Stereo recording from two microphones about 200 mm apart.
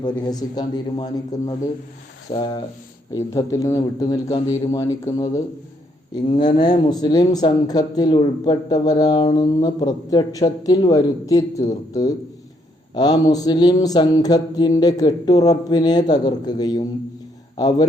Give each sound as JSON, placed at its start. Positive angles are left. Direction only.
{"t": 0.0, "sound": "a man's voice", "side_deg": 20}
{"t": 6.4, "sound": "speech", "side_deg": 25}